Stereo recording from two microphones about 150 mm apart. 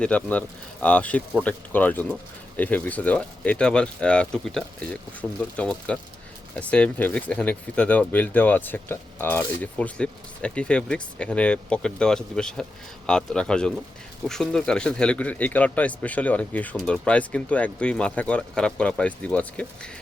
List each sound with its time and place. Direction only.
0.0 s speech: 10° left (ahead or behind)